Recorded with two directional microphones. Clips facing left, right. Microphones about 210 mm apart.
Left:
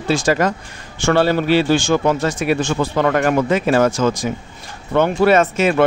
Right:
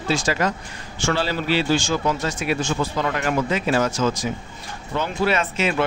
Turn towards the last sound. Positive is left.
turn(degrees=45)  # may be behind; listen again after turning